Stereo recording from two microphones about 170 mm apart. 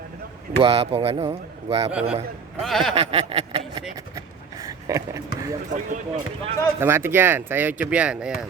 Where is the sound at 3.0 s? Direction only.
35° right (ahead or behind).